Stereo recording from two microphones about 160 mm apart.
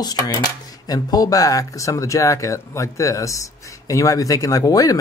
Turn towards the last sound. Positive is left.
turn(degrees=20)  # may be behind; listen again after turning